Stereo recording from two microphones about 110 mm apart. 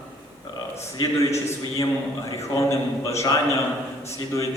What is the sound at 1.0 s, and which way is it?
A man's voice, 30° left (ahead or behind).